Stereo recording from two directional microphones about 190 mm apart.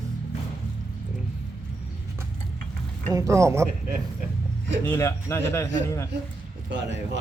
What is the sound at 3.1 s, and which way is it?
Speech, 15° right (ahead or behind).